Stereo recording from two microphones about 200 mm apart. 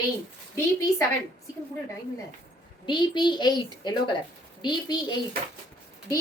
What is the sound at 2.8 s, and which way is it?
A woman's voice, 20° left (ahead or behind).